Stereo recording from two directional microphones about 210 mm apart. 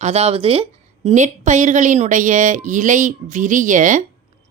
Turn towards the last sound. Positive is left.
turn(degrees=-35)  # may be behind; listen again after turning